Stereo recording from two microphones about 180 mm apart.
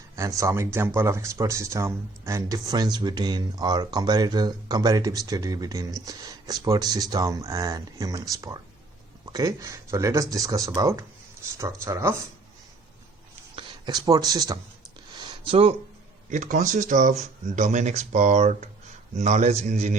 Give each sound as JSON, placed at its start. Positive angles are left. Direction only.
{"t": 0.2, "sound": "speech", "side_deg": -15}
{"t": 13.6, "sound": "a sound", "side_deg": -25}
{"t": 16.3, "sound": "speech", "side_deg": -45}